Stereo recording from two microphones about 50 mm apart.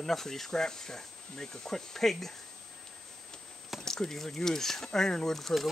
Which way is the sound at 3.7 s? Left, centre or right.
Centre.